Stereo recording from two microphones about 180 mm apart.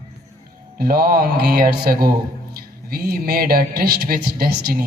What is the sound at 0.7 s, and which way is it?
Speech, 55° right (ahead or behind).